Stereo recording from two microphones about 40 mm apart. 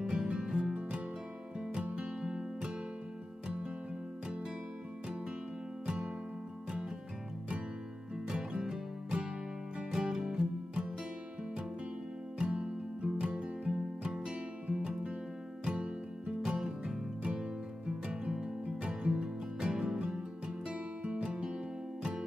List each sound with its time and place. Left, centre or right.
0.1 s music: right
8.6 s music: right
12.4 s music: right